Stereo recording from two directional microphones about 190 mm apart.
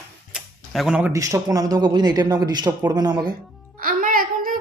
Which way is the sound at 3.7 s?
45° right (ahead or behind).